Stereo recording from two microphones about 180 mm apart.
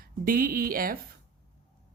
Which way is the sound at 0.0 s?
55° right (ahead or behind).